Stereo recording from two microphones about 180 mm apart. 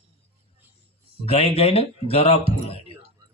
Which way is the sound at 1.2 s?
30° left (ahead or behind).